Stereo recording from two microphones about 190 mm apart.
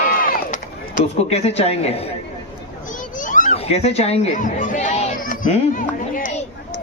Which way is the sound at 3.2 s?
45° left (ahead or behind).